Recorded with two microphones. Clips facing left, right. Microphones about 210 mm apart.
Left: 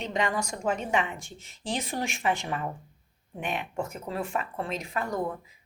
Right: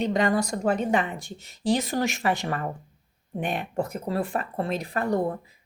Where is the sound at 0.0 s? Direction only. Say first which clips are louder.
Right 6 dB; 35° right (ahead or behind).